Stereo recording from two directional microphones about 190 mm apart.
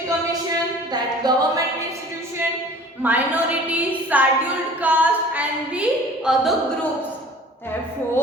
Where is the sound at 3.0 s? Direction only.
10° right (ahead or behind).